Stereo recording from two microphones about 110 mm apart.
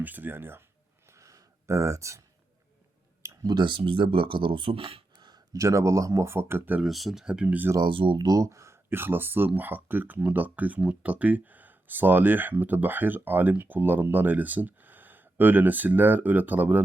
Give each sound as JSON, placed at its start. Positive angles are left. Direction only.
{"t": 0.0, "sound": "speech", "side_deg": -15}
{"t": 1.0, "sound": "a sound", "side_deg": -25}
{"t": 3.2, "sound": "speech", "side_deg": -40}
{"t": 5.1, "sound": "speech", "side_deg": -40}
{"t": 6.8, "sound": "speech", "side_deg": 0}
{"t": 7.8, "sound": "speech", "side_deg": -50}
{"t": 8.3, "sound": "speech", "side_deg": -30}